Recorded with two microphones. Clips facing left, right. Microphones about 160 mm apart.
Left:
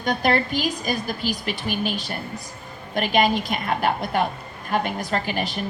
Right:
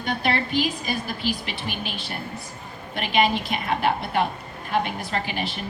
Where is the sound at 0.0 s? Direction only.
40° left (ahead or behind).